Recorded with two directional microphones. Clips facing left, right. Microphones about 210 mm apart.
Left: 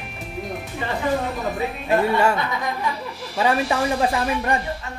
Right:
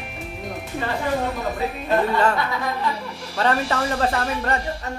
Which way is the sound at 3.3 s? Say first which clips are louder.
Left 1 dB; 10° left (ahead or behind).